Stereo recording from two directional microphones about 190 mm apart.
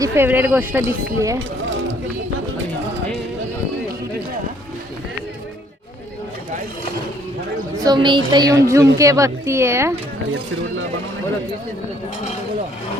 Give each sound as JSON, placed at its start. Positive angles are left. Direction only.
{"t": 0.0, "sound": "speech", "side_deg": -10}
{"t": 7.8, "sound": "a woman's voice", "side_deg": -25}